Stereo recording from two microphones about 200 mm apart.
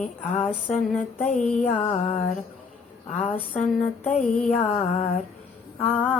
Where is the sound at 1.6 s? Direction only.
40° left (ahead or behind).